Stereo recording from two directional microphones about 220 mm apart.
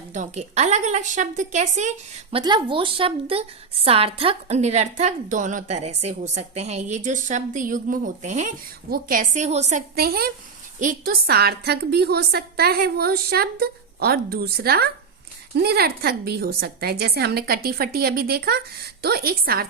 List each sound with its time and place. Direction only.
0.1 s a woman's voice: 30° right (ahead or behind)
2.3 s a woman's voice: 20° right (ahead or behind)
9.9 s a woman's voice: 45° right (ahead or behind)